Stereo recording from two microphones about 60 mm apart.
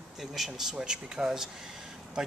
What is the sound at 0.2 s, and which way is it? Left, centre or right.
Speech, centre.